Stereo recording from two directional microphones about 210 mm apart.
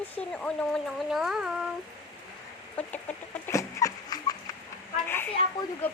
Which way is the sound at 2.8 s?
5° left (ahead or behind).